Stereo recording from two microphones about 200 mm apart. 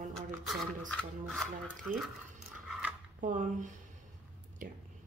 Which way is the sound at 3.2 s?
40° right (ahead or behind).